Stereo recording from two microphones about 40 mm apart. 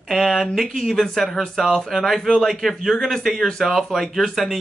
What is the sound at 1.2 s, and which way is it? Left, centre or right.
Speech, centre.